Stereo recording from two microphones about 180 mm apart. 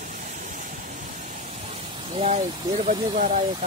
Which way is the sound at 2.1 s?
35° right (ahead or behind).